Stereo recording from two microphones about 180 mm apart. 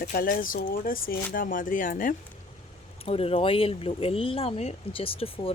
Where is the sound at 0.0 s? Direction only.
50° left (ahead or behind).